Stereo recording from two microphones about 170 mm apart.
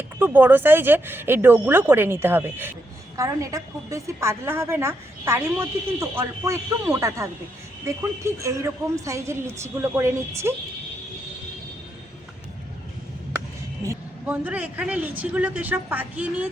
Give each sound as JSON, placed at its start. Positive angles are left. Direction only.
{"t": 0.2, "sound": "a woman's voice", "side_deg": -10}
{"t": 13.8, "sound": "a woman's voice", "side_deg": -10}